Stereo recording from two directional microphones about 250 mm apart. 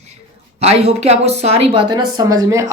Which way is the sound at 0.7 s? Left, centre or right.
Right.